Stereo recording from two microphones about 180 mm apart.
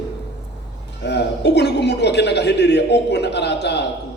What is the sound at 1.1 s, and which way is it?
A man's voice, 70° left (ahead or behind).